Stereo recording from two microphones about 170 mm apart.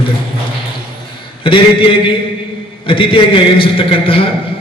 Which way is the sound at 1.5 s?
30° left (ahead or behind).